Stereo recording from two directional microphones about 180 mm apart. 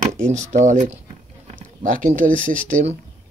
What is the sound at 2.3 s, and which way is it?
Speech, 45° right (ahead or behind).